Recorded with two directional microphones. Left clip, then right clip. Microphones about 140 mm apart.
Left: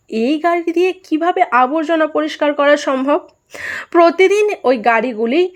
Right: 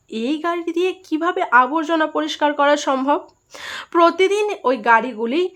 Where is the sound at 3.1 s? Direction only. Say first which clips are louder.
Left 4 dB; 25° left (ahead or behind).